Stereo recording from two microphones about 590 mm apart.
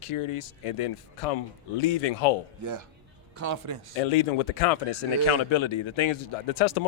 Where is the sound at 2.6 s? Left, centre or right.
Right.